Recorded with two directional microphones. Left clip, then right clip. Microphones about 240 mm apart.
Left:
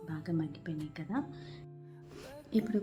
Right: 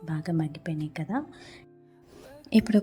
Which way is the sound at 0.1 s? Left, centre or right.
Right.